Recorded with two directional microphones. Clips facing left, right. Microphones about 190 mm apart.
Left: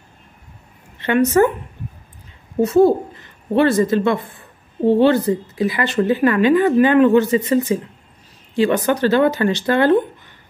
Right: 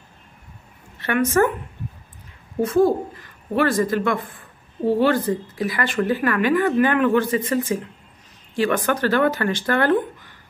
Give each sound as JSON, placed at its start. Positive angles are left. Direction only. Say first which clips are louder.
{"t": 1.4, "sound": "a woman's voice", "louder": "left 3 dB", "side_deg": 20}
{"t": 2.6, "sound": "a woman's voice", "louder": "left 4 dB", "side_deg": 25}